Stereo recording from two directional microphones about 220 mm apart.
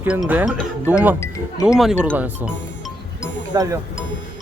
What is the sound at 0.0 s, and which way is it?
Speech, 5° right (ahead or behind).